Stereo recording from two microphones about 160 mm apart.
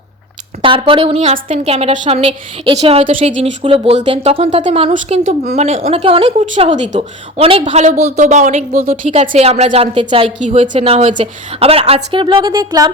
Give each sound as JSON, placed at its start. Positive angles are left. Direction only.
{"t": 0.6, "sound": "a woman's voice", "side_deg": -30}
{"t": 6.8, "sound": "a woman's voice", "side_deg": -50}
{"t": 10.2, "sound": "a woman's voice", "side_deg": -45}